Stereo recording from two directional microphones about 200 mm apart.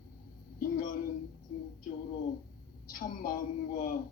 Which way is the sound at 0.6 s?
45° left (ahead or behind).